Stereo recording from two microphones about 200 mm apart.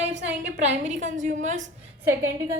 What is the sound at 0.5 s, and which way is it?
A woman's voice, 35° right (ahead or behind).